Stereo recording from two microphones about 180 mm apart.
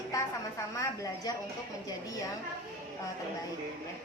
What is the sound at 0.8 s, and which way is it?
Speech, 20° left (ahead or behind).